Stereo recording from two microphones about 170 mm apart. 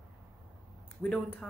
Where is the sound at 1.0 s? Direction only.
5° left (ahead or behind).